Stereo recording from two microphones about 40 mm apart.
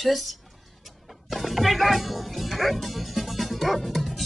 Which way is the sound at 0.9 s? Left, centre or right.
Centre.